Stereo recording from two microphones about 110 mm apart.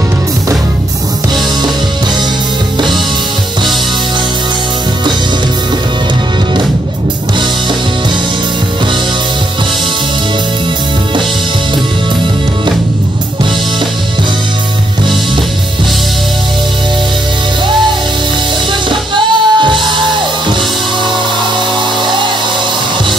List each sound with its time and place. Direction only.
18.9 s music: 45° right (ahead or behind)
22.0 s music: 45° right (ahead or behind)